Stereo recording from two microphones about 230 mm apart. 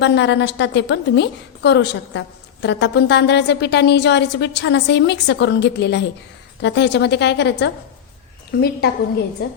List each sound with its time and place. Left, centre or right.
0.0 s a woman's voice: left